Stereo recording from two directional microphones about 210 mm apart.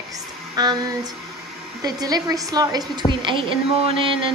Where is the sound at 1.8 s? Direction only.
20° right (ahead or behind).